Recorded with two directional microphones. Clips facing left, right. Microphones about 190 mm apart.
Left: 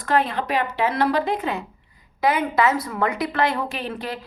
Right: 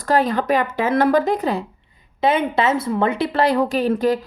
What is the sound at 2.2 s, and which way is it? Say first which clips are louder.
Speech: right 2 dB; 25° right (ahead or behind).